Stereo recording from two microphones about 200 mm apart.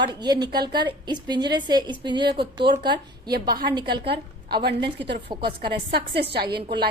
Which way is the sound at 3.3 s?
50° right (ahead or behind).